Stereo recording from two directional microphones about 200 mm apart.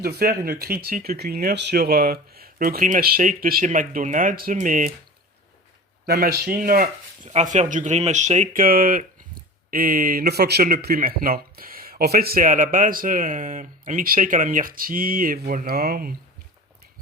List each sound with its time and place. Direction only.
0.0 s speech: 50° right (ahead or behind)
6.1 s speech: 50° right (ahead or behind)